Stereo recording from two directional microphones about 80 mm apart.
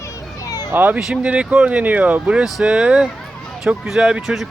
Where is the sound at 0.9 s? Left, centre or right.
Centre.